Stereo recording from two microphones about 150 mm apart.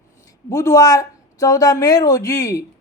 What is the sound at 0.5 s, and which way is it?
Speech, 20° left (ahead or behind).